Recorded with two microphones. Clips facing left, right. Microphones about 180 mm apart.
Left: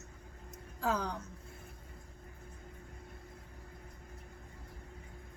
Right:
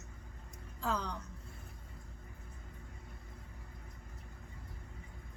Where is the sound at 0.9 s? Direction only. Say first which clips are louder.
Left 3 dB; 10° left (ahead or behind).